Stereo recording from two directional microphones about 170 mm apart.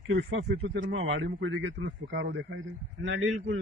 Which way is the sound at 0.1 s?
85° right.